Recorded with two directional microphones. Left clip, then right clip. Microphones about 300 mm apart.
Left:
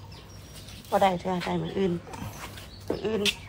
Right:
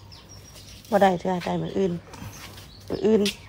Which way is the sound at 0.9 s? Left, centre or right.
Right.